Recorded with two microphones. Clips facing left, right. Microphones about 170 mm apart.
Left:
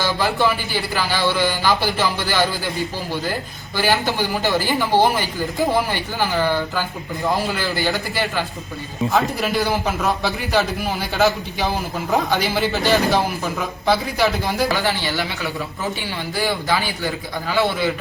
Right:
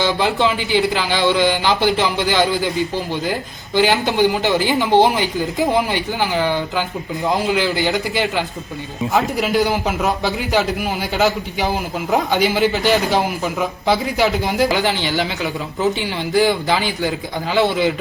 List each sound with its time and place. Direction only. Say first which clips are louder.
0.0 s speech: right 2 dB; 20° right (ahead or behind)
3.8 s a man's voice: right 5 dB; 20° right (ahead or behind)